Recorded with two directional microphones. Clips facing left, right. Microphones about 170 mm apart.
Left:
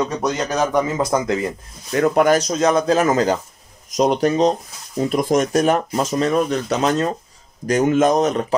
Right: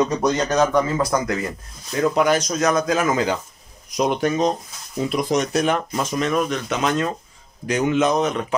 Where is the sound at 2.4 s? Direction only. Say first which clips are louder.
Left 3 dB; 25° left (ahead or behind).